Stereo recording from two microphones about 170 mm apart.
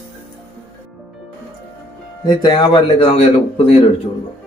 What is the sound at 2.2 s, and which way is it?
A man's voice, 25° left (ahead or behind).